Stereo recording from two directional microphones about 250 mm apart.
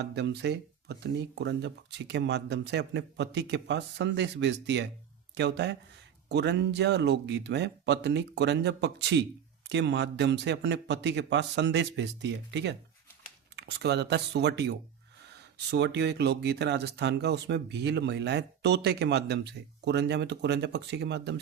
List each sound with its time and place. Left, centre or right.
0.0 s speech: right